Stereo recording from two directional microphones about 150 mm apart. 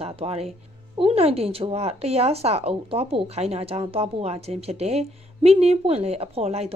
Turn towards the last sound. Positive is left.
turn(degrees=-45)  # may be behind; listen again after turning